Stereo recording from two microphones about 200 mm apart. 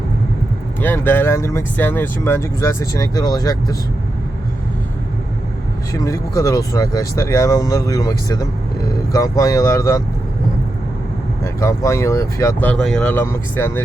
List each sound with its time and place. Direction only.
0.8 s speech: 10° left (ahead or behind)
5.9 s speech: 15° left (ahead or behind)
9.1 s speech: 15° left (ahead or behind)
11.4 s speech: 15° left (ahead or behind)